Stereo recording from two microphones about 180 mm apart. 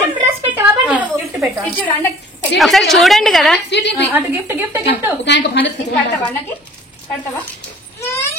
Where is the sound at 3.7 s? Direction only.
75° left (ahead or behind).